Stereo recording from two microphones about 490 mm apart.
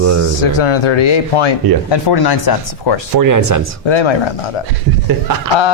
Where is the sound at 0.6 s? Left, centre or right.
Left.